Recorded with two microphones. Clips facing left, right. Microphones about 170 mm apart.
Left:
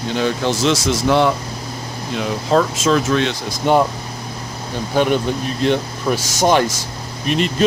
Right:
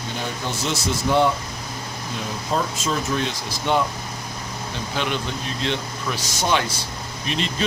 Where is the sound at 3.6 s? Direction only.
45° left (ahead or behind).